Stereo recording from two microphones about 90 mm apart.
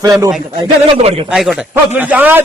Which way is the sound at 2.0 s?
15° right (ahead or behind).